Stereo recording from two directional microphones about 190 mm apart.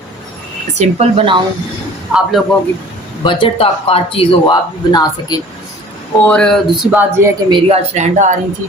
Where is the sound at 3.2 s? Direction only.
30° left (ahead or behind).